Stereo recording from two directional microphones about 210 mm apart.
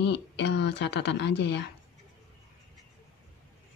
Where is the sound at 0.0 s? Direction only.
55° left (ahead or behind).